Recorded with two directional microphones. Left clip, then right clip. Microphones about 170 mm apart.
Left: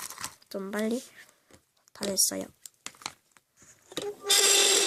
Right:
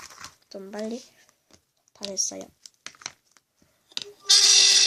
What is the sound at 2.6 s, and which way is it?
Crumpling, 10° left (ahead or behind).